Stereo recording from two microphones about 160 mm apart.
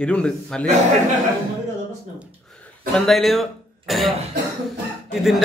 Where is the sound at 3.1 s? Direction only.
Centre (ahead or behind).